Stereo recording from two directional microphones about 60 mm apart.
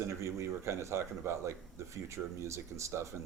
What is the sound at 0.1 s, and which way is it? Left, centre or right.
A man's voice, right.